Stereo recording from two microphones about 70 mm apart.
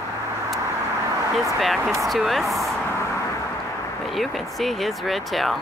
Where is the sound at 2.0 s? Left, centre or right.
Centre.